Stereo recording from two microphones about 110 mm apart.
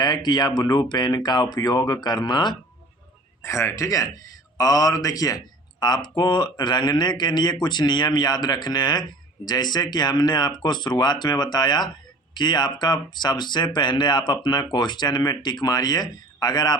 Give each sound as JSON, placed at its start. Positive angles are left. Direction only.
{"t": 0.0, "sound": "speech", "side_deg": 40}
{"t": 3.4, "sound": "speech", "side_deg": 25}